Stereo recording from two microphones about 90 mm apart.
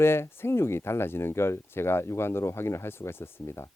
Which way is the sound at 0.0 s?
25° left (ahead or behind).